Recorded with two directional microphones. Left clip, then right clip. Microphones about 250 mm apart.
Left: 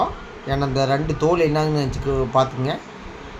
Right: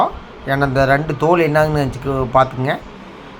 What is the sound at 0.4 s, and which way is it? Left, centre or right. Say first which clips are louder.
A man's voice: right 6 dB; centre.